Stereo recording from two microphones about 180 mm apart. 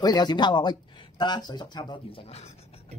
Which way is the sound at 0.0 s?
20° left (ahead or behind).